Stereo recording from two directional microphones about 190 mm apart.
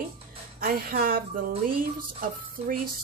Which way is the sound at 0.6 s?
50° right (ahead or behind).